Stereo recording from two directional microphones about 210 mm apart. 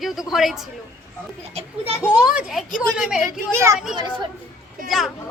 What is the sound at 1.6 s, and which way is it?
Speech, 30° right (ahead or behind).